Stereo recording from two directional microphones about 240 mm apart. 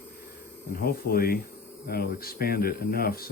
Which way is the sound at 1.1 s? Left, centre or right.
Left.